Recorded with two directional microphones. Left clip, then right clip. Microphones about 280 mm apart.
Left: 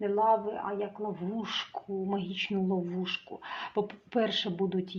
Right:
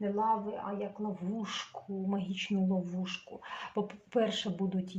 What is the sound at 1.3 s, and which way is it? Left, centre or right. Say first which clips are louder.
Speech: left 4 dB; left.